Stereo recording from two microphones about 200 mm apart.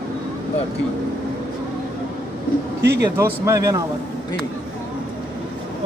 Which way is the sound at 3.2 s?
15° right (ahead or behind).